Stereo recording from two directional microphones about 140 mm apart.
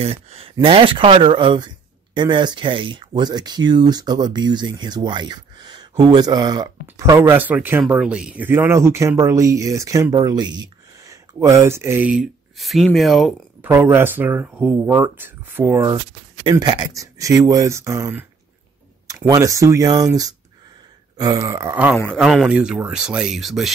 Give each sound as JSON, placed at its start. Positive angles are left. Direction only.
{"t": 0.0, "sound": "speech", "side_deg": -45}
{"t": 13.6, "sound": "speech", "side_deg": -15}
{"t": 16.4, "sound": "speech", "side_deg": -35}
{"t": 21.9, "sound": "speech", "side_deg": 0}